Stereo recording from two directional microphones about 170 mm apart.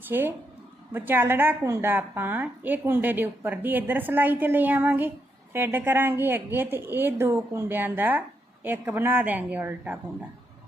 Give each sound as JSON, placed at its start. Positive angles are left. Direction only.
{"t": 0.1, "sound": "a woman's voice", "side_deg": -10}